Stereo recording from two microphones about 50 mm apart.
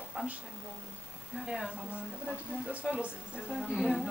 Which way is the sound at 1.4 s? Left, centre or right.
Centre.